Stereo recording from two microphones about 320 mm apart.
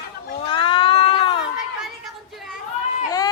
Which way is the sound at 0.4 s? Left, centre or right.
Centre.